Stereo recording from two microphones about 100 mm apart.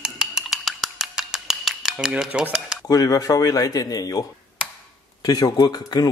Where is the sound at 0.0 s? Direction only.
5° right (ahead or behind).